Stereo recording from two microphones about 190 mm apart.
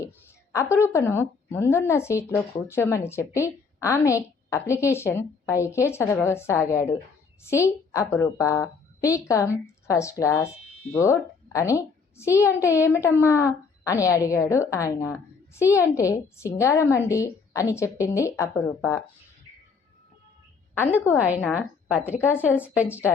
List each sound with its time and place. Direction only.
0.5 s a woman's voice: 15° left (ahead or behind)
21.2 s speech: 5° right (ahead or behind)